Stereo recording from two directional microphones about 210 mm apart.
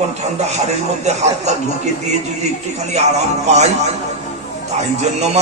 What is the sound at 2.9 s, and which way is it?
Speech, 30° right (ahead or behind).